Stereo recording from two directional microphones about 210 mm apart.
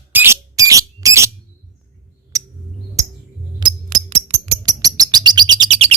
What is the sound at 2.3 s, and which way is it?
Bird, 15° right (ahead or behind).